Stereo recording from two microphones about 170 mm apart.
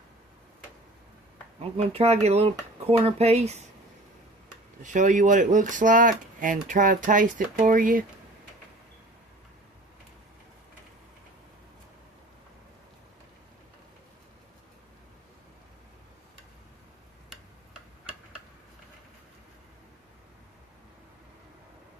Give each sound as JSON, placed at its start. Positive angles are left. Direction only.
{"t": 1.7, "sound": "speech", "side_deg": -35}
{"t": 4.8, "sound": "speech", "side_deg": -45}
{"t": 17.7, "sound": "tick-tock", "side_deg": -5}